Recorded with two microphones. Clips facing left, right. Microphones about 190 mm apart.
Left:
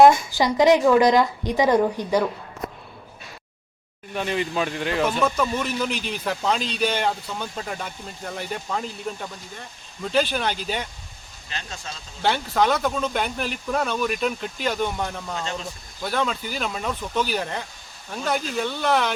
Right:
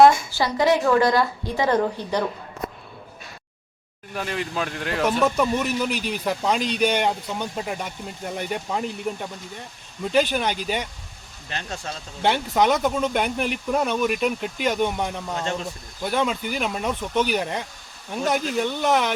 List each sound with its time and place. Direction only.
0.0 s a woman's voice: 15° left (ahead or behind)
4.1 s speech: centre (ahead or behind)
5.2 s speech: 15° right (ahead or behind)
11.4 s speech: 55° right (ahead or behind)
12.2 s speech: 15° right (ahead or behind)